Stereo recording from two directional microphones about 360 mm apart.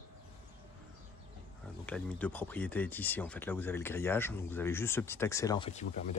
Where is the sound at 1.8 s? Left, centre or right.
Centre.